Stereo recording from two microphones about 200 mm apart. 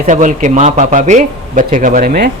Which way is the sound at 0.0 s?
35° right (ahead or behind).